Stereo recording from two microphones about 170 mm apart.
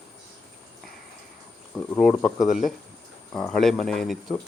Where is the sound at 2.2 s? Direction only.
25° left (ahead or behind).